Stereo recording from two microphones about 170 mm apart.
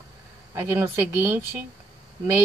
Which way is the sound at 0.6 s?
15° right (ahead or behind).